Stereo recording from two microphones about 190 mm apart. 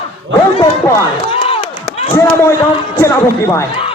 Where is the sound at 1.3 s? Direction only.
30° left (ahead or behind).